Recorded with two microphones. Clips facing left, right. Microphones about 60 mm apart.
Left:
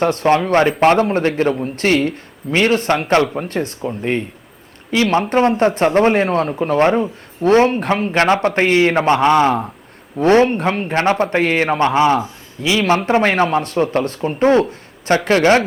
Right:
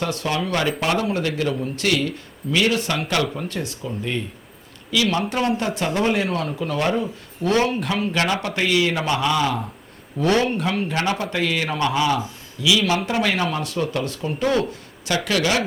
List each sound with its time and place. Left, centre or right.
0.0 s a man's voice: left